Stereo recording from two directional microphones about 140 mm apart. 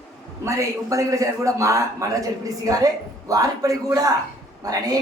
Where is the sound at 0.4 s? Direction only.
20° right (ahead or behind).